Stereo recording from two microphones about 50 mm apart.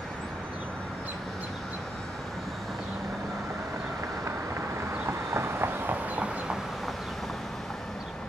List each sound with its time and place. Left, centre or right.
4.6 s vehicle: right
6.1 s train: right